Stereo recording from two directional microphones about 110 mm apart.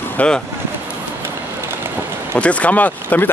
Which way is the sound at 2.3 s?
10° left (ahead or behind).